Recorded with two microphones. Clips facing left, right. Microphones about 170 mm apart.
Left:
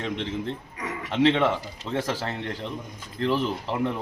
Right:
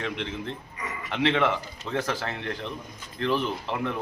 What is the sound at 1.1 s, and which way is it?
Speech, 30° left (ahead or behind).